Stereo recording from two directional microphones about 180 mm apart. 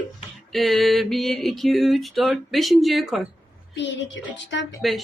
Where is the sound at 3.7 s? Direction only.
80° left.